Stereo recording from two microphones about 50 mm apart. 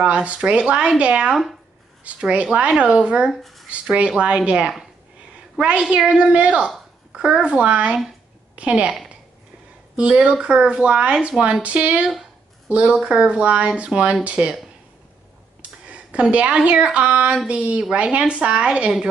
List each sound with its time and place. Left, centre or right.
0.0 s speech: right
1.3 s speech: centre
2.3 s speech: right
3.3 s speech: centre
4.5 s speech: right
7.1 s a sound: centre
7.4 s speech: right
9.9 s a woman's voice: right
15.9 s speech: right